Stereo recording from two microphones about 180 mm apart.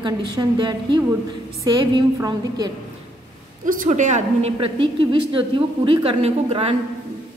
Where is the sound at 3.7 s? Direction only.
45° right (ahead or behind).